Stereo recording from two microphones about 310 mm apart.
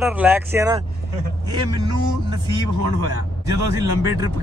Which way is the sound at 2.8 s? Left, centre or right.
Right.